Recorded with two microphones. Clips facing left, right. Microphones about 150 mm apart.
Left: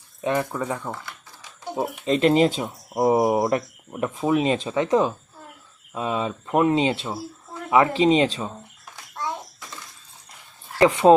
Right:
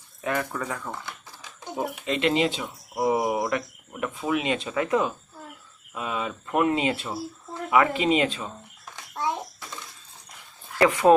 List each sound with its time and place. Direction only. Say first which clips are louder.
0.2 s speech: left 4 dB; 25° left (ahead or behind)
2.0 s speech: left 6 dB; 40° left (ahead or behind)
4.7 s speech: left 2 dB; 25° left (ahead or behind)
10.8 s speech: left 3 dB; 30° left (ahead or behind)